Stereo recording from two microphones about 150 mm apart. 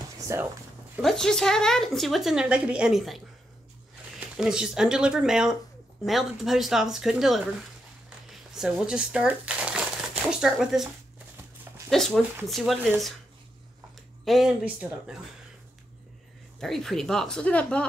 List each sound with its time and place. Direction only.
0.3 s speech: 20° right (ahead or behind)
1.0 s a woman's voice: 5° left (ahead or behind)
4.4 s a woman's voice: 5° right (ahead or behind)
8.3 s crumpling: 5° right (ahead or behind)
10.3 s a woman's voice: 5° right (ahead or behind)
11.9 s a woman's voice: 5° left (ahead or behind)
14.2 s speech: centre (ahead or behind)
16.5 s a woman's voice: 5° left (ahead or behind)